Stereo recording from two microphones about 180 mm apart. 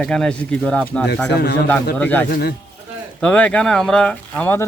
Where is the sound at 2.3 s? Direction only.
60° left (ahead or behind).